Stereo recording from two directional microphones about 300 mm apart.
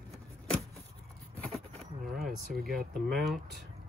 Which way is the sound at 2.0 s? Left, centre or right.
Centre.